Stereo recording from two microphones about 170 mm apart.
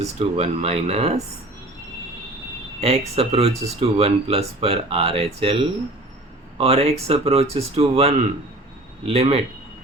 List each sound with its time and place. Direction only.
0.0 s speech: 40° right (ahead or behind)
2.8 s speech: 35° right (ahead or behind)